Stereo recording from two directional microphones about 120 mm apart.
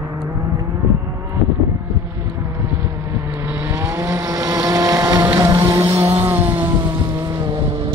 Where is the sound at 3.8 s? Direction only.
20° right (ahead or behind).